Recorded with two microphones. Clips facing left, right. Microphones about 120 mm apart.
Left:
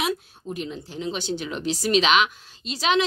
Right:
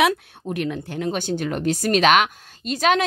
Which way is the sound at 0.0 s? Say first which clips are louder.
Right 7 dB; 65° right (ahead or behind).